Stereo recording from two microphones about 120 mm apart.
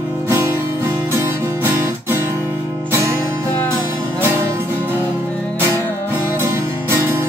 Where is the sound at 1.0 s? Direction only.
20° right (ahead or behind).